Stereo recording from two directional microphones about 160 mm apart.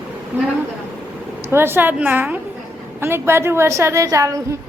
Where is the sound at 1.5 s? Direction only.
15° right (ahead or behind).